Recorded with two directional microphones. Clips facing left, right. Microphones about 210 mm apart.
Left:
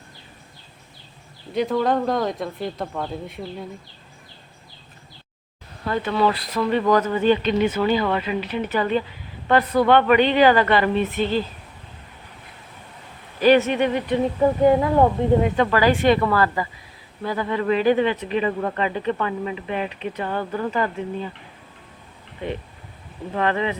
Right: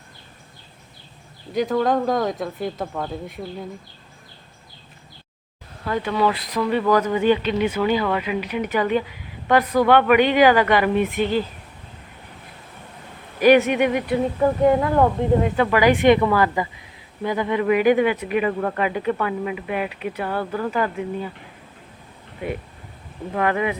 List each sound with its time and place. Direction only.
1.5 s speech: centre (ahead or behind)
5.9 s a woman's voice: 10° right (ahead or behind)
13.4 s a woman's voice: 15° right (ahead or behind)
14.4 s speech: 5° left (ahead or behind)
15.7 s a woman's voice: 15° right (ahead or behind)
23.4 s a woman's voice: 10° right (ahead or behind)